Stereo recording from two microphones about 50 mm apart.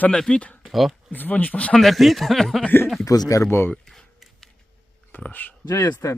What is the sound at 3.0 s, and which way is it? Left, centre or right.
Speech, left.